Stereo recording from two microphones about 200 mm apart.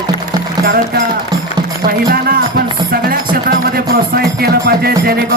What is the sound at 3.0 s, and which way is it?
A man's voice, 50° right (ahead or behind).